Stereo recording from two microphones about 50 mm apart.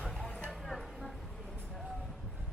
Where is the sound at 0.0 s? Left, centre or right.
Centre.